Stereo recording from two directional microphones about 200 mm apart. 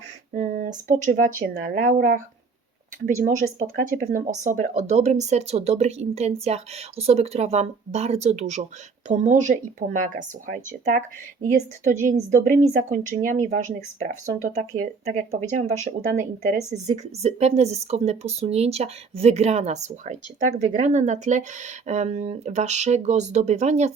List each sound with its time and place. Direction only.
0.3 s speech: 40° right (ahead or behind)